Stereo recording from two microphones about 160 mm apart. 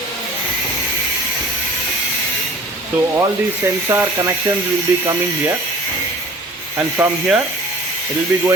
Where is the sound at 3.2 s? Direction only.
20° right (ahead or behind).